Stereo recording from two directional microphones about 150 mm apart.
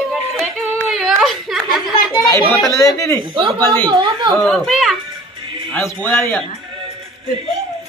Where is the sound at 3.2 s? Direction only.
35° right (ahead or behind).